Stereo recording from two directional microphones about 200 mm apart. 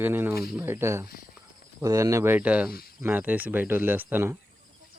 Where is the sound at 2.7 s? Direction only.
50° left (ahead or behind).